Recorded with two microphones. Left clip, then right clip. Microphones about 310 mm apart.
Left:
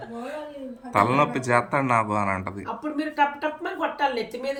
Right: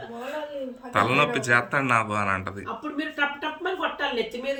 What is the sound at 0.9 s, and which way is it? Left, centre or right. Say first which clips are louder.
Speech: left 1 dB; centre.